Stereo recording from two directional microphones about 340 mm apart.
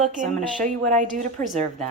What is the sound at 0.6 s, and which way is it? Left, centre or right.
Speech, right.